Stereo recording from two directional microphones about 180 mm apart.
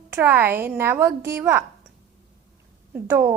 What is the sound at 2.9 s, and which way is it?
Speech, 15° right (ahead or behind).